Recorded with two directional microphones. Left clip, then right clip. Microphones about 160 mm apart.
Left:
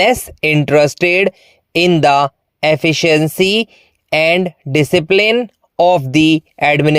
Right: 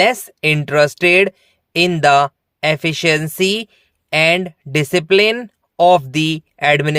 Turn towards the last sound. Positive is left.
turn(degrees=30)  # may be behind; listen again after turning